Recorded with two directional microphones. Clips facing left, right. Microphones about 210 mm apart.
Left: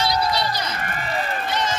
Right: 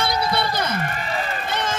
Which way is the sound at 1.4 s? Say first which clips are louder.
Left 2 dB; 55° right (ahead or behind).